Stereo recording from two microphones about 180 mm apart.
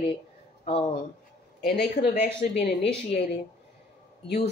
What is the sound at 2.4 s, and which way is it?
Speech, 55° left (ahead or behind).